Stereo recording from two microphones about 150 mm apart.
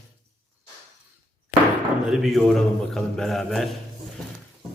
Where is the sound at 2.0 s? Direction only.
Centre (ahead or behind).